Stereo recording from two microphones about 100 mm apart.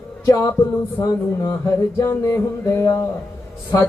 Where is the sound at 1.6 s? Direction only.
30° left (ahead or behind).